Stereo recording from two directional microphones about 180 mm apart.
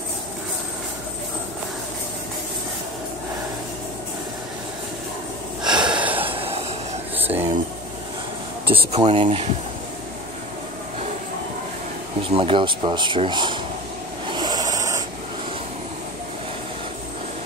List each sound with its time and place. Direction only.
5.6 s gasp: 25° right (ahead or behind)
5.9 s gasp: 5° right (ahead or behind)
7.2 s a sound: 10° right (ahead or behind)
8.6 s speech: 35° right (ahead or behind)
12.2 s speech: 30° right (ahead or behind)
14.3 s a sound: 20° right (ahead or behind)